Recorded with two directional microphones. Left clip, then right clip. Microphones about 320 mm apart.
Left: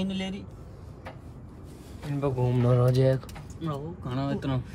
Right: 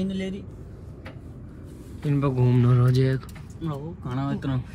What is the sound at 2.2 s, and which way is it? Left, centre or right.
Speech, centre.